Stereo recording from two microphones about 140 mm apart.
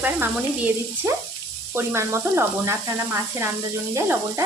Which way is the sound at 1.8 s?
20° right (ahead or behind).